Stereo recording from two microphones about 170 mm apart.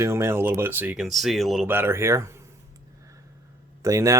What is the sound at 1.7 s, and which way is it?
Speech, 15° right (ahead or behind).